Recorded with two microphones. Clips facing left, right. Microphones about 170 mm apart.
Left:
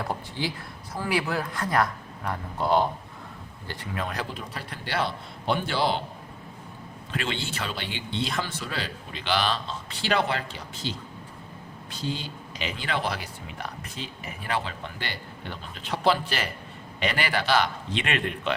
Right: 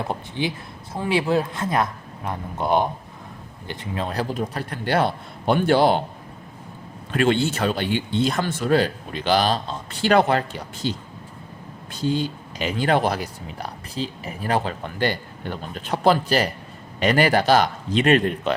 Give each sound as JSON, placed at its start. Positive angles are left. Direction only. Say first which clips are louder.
{"t": 0.0, "sound": "a man's voice", "louder": "right 4 dB", "side_deg": -20}
{"t": 7.1, "sound": "speech", "louder": "right 12 dB", "side_deg": -50}